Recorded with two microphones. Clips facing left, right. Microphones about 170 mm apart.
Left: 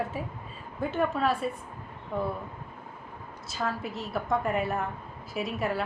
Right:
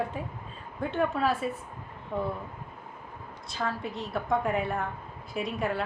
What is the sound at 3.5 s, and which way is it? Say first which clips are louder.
A woman's voice: even; 5° left (ahead or behind).